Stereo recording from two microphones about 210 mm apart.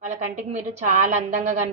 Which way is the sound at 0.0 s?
35° right (ahead or behind).